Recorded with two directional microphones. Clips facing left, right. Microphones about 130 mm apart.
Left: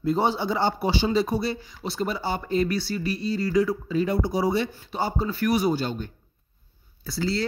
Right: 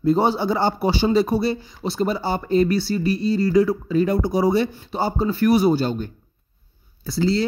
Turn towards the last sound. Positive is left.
turn(degrees=-25)  # may be behind; listen again after turning